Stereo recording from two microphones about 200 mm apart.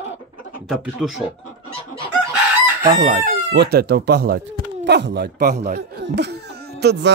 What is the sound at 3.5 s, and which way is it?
Speech, 55° right (ahead or behind).